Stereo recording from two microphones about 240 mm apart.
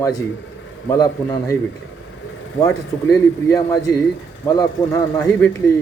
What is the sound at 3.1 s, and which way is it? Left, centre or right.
Speech, centre.